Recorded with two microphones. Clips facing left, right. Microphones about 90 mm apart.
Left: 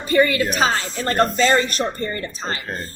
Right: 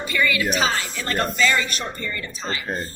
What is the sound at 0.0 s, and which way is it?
A woman's voice, 40° left (ahead or behind).